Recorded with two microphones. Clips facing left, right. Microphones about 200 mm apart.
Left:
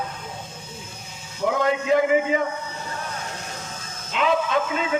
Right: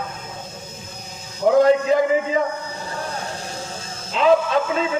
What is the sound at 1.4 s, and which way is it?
A man's voice, 40° right (ahead or behind).